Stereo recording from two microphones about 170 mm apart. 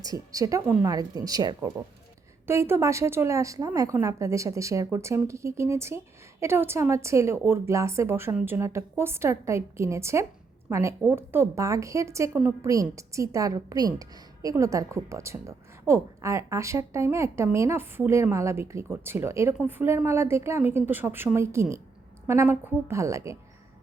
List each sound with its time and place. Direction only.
0.0 s a woman's voice: 20° right (ahead or behind)